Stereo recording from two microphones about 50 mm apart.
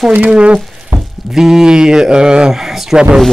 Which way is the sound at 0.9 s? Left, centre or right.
Right.